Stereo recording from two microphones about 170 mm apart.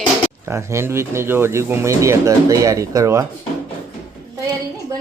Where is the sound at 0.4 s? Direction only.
15° right (ahead or behind).